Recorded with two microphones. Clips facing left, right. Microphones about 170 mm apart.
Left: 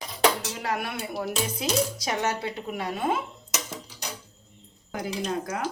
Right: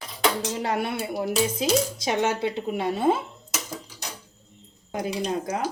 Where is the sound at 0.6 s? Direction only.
25° right (ahead or behind).